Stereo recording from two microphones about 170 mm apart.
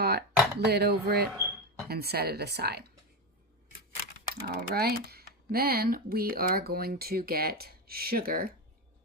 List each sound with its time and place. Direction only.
0.0 s a sound: 70° right (ahead or behind)
0.6 s a woman's voice: 70° right (ahead or behind)
4.0 s speech: 65° right (ahead or behind)